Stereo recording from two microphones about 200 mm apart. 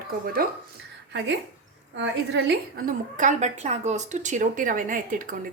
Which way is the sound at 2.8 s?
40° right (ahead or behind).